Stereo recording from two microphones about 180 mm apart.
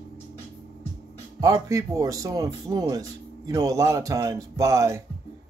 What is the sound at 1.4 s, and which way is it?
Speech, 20° right (ahead or behind).